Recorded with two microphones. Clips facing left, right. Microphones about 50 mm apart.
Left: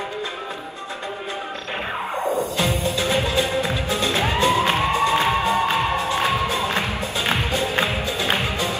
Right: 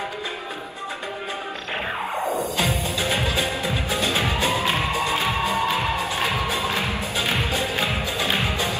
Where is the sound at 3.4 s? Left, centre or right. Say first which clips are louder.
Left 3 dB; left.